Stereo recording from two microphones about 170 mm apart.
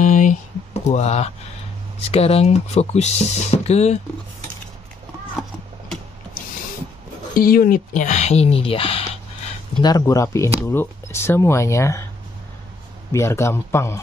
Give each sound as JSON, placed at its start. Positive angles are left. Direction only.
{"t": 0.0, "sound": "a sound", "side_deg": 50}
{"t": 0.8, "sound": "speech", "side_deg": 40}
{"t": 7.3, "sound": "speech", "side_deg": 60}
{"t": 9.8, "sound": "speech", "side_deg": 25}
{"t": 13.1, "sound": "speech", "side_deg": 15}